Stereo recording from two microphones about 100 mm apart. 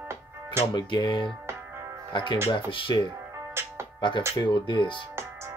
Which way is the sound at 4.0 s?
55° left (ahead or behind).